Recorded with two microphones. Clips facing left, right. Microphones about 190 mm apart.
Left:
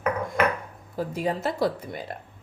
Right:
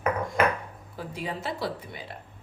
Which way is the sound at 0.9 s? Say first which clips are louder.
Left 7 dB; 45° left (ahead or behind).